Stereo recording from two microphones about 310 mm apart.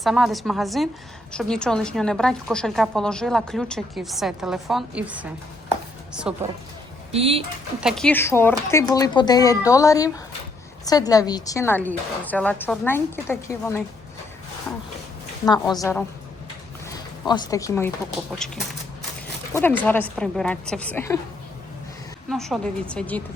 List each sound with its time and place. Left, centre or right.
0.0 s a woman's voice: centre
7.1 s speech: centre
7.8 s a woman's voice: centre
15.7 s a woman's voice: centre
17.2 s a woman's voice: centre
22.3 s a woman's voice: centre